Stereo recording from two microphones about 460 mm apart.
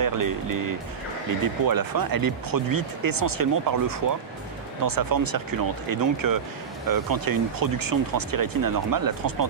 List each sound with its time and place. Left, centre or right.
0.0 s speech: right